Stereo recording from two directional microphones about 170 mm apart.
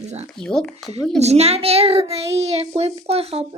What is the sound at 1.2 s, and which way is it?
A child's voice, 40° right (ahead or behind).